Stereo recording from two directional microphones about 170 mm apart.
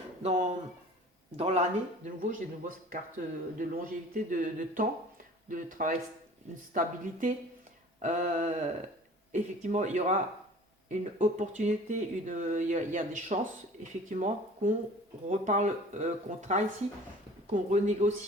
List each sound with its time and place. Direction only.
0.2 s speech: 45° right (ahead or behind)
2.0 s speech: 50° right (ahead or behind)